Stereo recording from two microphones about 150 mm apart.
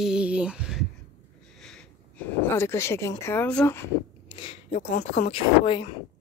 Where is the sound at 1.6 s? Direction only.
5° left (ahead or behind).